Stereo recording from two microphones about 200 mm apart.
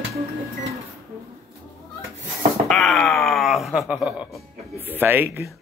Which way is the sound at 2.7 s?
Centre (ahead or behind).